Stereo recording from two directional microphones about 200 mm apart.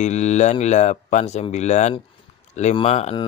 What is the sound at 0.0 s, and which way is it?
Speech, 35° left (ahead or behind).